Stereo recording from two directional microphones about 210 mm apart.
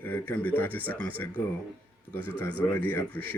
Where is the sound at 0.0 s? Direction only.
10° left (ahead or behind).